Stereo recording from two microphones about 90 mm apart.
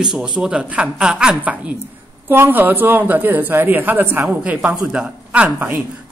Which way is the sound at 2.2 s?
25° right (ahead or behind).